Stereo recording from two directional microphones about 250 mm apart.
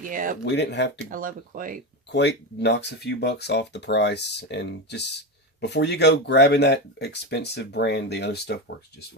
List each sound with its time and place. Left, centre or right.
0.0 s speech: right
0.4 s speech: left
0.9 s speech: right
2.1 s speech: left